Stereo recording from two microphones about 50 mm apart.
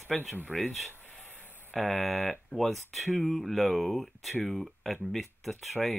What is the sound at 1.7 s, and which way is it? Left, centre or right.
Speech, centre.